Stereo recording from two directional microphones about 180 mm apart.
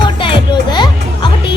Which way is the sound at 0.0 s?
25° left (ahead or behind).